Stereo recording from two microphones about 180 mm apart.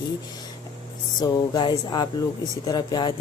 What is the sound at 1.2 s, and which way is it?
A woman's voice, 20° left (ahead or behind).